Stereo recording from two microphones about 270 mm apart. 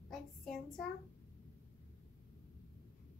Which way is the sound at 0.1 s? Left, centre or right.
Centre.